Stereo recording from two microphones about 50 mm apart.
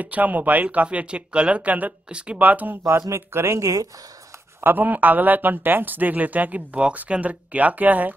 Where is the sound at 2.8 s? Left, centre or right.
Right.